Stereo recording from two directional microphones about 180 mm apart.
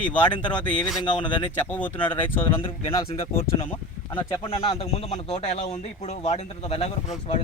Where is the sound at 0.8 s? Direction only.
Centre (ahead or behind).